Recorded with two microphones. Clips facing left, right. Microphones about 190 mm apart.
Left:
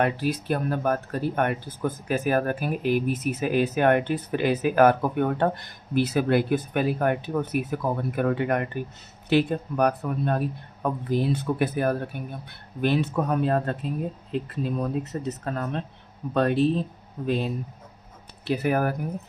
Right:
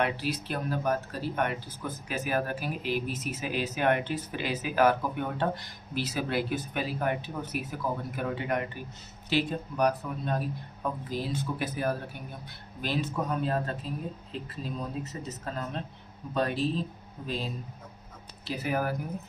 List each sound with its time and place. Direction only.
0.0 s speech: 50° left (ahead or behind)